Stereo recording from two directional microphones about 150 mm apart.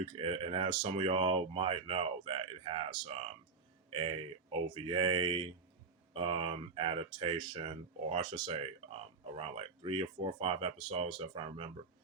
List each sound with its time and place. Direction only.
0.1 s speech: 40° right (ahead or behind)
7.6 s speech: 45° right (ahead or behind)
8.2 s speech: 30° right (ahead or behind)
8.5 s speech: 40° right (ahead or behind)